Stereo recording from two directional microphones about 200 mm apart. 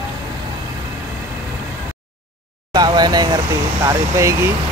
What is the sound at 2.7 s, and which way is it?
Vehicle, 20° right (ahead or behind).